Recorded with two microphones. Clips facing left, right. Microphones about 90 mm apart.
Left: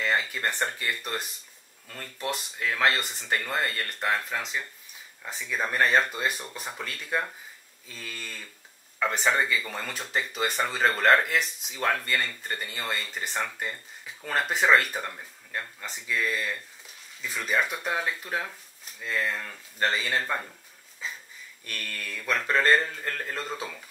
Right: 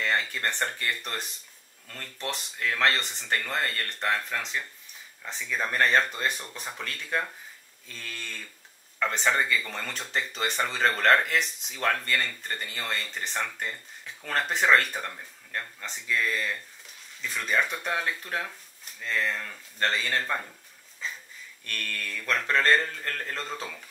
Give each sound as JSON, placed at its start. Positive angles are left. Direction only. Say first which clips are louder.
{"t": 0.0, "sound": "speech", "louder": "left 1 dB", "side_deg": 5}
{"t": 21.0, "sound": "a sound", "louder": "even", "side_deg": 5}
{"t": 21.6, "sound": "speech", "louder": "right 2 dB", "side_deg": 10}